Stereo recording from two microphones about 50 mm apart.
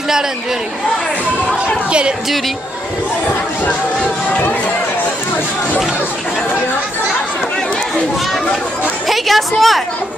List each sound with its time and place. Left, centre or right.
1.9 s speech: right
4.3 s speech: left
9.0 s a woman's voice: centre